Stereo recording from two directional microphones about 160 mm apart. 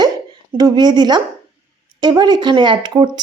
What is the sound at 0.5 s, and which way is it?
Speech, 25° right (ahead or behind).